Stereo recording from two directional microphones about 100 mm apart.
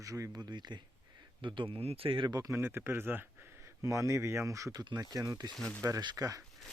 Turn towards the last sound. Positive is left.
turn(degrees=-35)  # may be behind; listen again after turning